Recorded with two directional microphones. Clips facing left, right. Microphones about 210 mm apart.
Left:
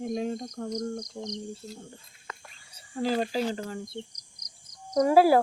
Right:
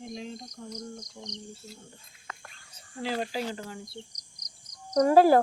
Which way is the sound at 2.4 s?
10° left (ahead or behind).